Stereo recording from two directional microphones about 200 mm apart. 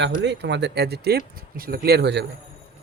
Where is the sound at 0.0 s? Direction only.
60° right (ahead or behind).